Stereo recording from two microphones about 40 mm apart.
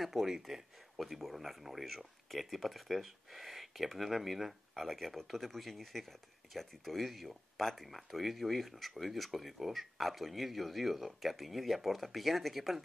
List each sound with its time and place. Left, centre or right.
0.0 s speech: centre